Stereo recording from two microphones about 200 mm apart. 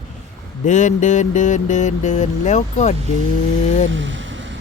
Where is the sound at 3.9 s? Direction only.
65° right (ahead or behind).